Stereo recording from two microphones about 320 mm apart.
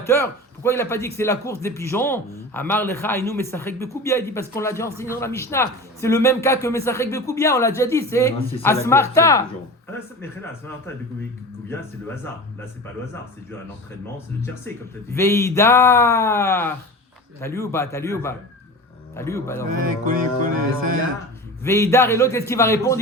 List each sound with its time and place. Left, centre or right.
0.0 s a man's voice: centre
15.1 s a man's voice: centre
19.8 s music: right
21.6 s a man's voice: centre